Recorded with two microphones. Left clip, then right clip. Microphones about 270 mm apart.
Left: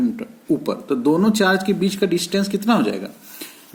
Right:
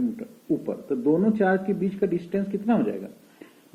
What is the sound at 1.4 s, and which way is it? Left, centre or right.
Speech, left.